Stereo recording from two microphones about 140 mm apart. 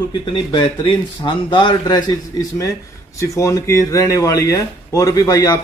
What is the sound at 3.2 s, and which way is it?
Speech, 20° left (ahead or behind).